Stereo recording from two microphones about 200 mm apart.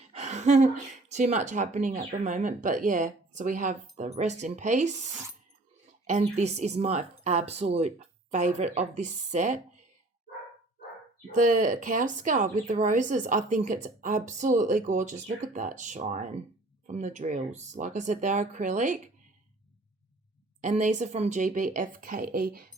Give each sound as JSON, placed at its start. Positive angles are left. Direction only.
{"t": 0.1, "sound": "speech", "side_deg": -35}
{"t": 6.1, "sound": "speech", "side_deg": -35}
{"t": 11.3, "sound": "speech", "side_deg": -40}
{"t": 20.6, "sound": "a woman's voice", "side_deg": -40}